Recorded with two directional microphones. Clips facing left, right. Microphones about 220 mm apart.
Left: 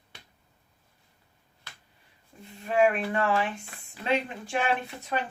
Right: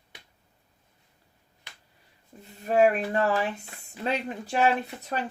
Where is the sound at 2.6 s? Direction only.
40° right (ahead or behind).